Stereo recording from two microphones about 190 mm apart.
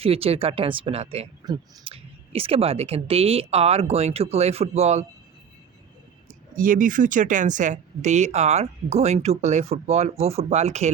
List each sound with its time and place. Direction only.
0.0 s speech: 30° right (ahead or behind)
6.6 s speech: 45° right (ahead or behind)